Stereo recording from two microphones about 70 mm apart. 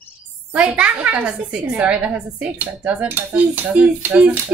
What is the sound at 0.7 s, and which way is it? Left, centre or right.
A woman's voice, centre.